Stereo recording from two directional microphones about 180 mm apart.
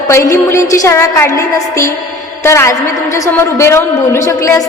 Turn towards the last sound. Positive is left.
turn(degrees=15)  # may be behind; listen again after turning